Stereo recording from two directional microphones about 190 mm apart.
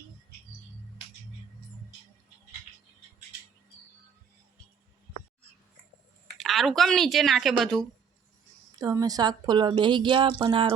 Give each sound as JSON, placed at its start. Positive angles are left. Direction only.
{"t": 6.3, "sound": "speech", "side_deg": 0}
{"t": 8.8, "sound": "a woman's voice", "side_deg": -20}